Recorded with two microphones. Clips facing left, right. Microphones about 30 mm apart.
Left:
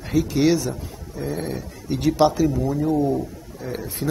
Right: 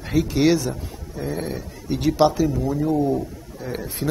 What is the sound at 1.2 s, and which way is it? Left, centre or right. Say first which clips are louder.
A man's voice: even; centre.